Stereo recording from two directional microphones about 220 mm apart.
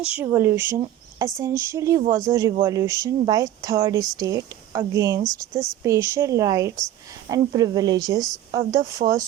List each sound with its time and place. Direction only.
0.2 s speech: 10° right (ahead or behind)